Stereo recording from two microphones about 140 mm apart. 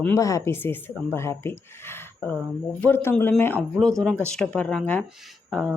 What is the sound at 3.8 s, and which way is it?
Speech, 5° left (ahead or behind).